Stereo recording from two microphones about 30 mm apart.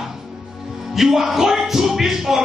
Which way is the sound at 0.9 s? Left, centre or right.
Centre.